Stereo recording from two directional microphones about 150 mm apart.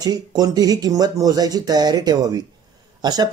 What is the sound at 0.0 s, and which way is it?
Speech, 25° right (ahead or behind).